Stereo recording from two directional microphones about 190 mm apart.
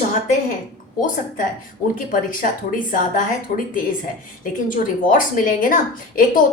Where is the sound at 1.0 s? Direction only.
45° left (ahead or behind).